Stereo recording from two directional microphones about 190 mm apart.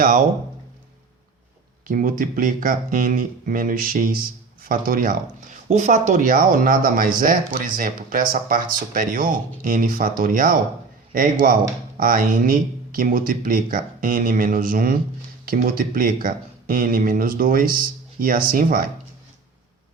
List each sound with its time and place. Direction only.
0.0 s speech: 45° right (ahead or behind)
1.9 s speech: 45° right (ahead or behind)